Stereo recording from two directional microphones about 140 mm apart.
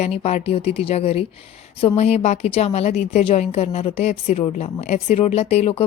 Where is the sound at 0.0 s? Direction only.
50° left (ahead or behind).